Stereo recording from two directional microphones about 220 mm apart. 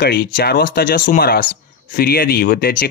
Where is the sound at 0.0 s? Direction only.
45° left (ahead or behind).